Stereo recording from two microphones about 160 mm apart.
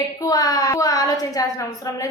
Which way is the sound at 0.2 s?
25° left (ahead or behind).